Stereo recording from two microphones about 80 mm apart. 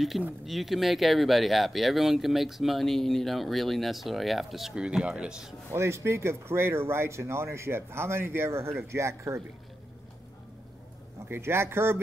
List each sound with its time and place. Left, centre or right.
0.5 s speech: centre
5.7 s speech: right
11.2 s speech: right